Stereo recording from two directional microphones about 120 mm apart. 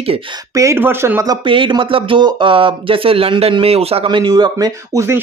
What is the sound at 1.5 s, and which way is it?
Speech, 45° right (ahead or behind).